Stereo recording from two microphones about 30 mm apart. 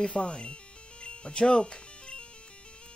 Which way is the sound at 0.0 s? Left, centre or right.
Left.